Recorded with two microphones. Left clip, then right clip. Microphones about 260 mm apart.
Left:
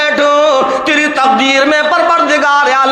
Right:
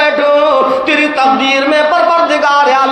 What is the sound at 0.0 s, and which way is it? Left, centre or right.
Music, left.